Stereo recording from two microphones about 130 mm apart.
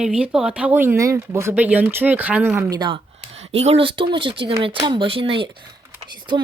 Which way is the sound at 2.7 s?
35° right (ahead or behind).